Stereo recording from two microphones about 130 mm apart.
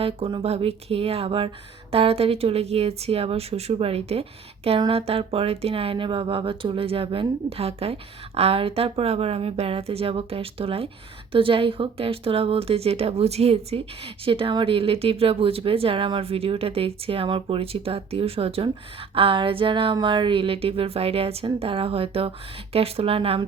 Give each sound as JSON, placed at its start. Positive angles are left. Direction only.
{"t": 0.0, "sound": "a woman's voice", "side_deg": -45}